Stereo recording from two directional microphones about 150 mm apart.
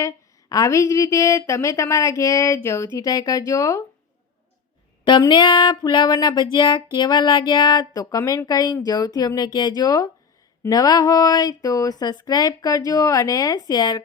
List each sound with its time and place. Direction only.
0.0 s speech: 20° left (ahead or behind)
5.0 s speech: 30° left (ahead or behind)